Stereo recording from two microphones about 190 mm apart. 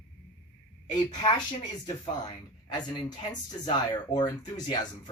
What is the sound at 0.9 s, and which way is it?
Speech, 20° left (ahead or behind).